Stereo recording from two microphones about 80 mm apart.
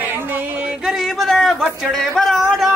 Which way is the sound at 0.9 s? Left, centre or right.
Centre.